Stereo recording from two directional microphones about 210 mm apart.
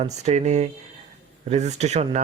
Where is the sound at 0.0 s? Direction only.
30° right (ahead or behind).